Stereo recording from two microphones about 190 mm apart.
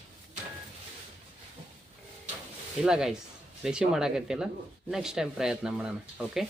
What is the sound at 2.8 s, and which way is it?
Speech, 5° right (ahead or behind).